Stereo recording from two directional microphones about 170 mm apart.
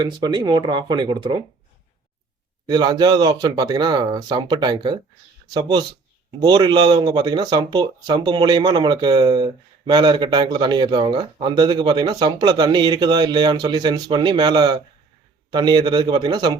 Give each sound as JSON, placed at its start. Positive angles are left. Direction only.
{"t": 0.0, "sound": "speech", "side_deg": -25}
{"t": 2.6, "sound": "speech", "side_deg": -25}